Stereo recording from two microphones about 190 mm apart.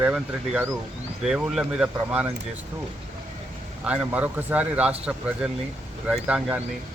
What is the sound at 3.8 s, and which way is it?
Speech, 5° right (ahead or behind).